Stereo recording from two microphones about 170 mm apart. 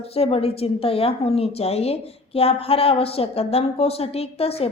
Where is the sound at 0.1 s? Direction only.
35° left (ahead or behind).